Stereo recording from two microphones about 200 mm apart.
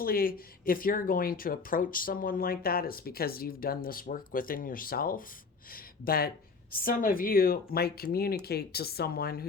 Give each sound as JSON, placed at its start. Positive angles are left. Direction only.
{"t": 0.0, "sound": "speech", "side_deg": 45}